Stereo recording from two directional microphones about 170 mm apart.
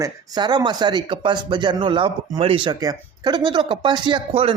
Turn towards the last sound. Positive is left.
turn(degrees=-30)  # may be behind; listen again after turning